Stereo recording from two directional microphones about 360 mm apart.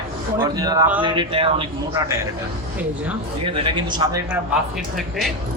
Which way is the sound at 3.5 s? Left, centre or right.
Centre.